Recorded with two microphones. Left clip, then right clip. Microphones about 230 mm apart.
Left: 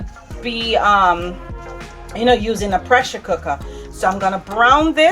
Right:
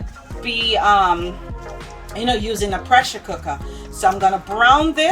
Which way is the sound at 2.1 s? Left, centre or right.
Centre.